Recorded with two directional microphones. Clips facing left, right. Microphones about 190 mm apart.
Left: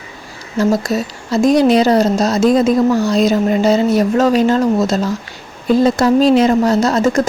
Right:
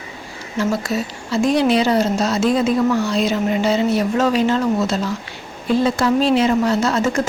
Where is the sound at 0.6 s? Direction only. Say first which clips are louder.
Left 5 dB; 40° left (ahead or behind).